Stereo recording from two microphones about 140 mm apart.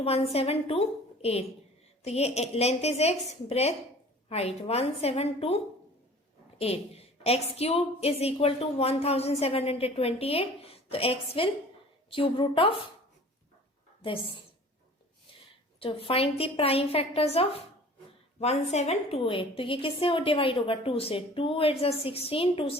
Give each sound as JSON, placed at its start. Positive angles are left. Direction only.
{"t": 0.0, "sound": "a woman's voice", "side_deg": 45}
{"t": 6.6, "sound": "a woman's voice", "side_deg": 45}
{"t": 14.0, "sound": "a woman's voice", "side_deg": 40}
{"t": 15.8, "sound": "a woman's voice", "side_deg": 40}